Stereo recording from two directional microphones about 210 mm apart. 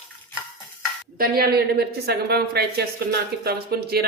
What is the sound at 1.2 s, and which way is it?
A woman's voice, 45° right (ahead or behind).